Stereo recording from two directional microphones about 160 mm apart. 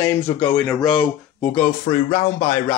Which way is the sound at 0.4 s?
10° left (ahead or behind).